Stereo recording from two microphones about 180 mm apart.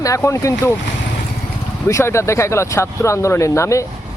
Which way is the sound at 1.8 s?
15° left (ahead or behind).